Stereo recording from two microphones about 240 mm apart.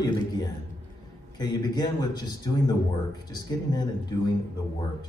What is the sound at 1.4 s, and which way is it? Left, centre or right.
A man's voice, centre.